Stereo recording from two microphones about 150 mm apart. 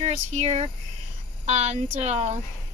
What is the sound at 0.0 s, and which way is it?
A woman's voice, 50° right (ahead or behind).